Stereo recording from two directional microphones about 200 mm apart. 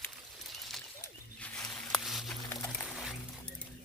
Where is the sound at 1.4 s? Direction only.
5° left (ahead or behind).